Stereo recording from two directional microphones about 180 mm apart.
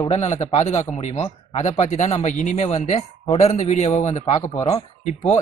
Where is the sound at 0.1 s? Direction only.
35° left (ahead or behind).